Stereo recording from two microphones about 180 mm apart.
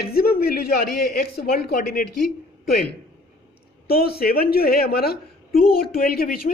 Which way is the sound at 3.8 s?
60° left (ahead or behind).